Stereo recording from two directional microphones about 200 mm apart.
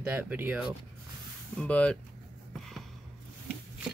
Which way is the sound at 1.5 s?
5° left (ahead or behind).